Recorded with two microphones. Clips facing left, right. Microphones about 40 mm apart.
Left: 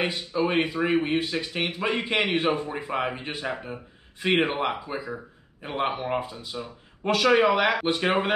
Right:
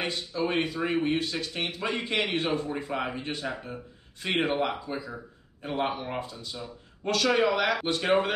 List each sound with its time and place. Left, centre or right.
0.0 s speech: centre